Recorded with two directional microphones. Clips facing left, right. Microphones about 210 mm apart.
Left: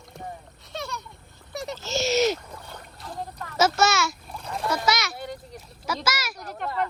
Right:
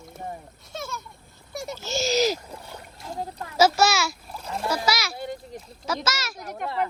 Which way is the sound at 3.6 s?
Centre (ahead or behind).